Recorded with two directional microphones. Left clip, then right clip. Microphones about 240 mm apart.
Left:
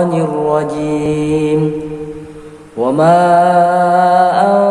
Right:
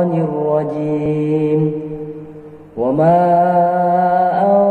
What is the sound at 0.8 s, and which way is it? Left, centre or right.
Mantra, centre.